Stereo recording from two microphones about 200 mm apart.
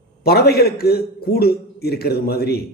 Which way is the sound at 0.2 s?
50° left (ahead or behind).